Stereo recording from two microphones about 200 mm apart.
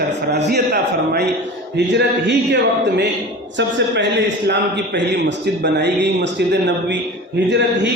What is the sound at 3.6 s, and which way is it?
A man's voice, 60° right (ahead or behind).